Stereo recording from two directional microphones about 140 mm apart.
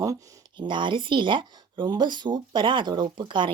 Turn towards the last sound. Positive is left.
turn(degrees=-35)  # may be behind; listen again after turning